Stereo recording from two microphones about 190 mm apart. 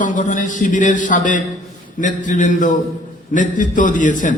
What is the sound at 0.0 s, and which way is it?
A man's voice, 40° left (ahead or behind).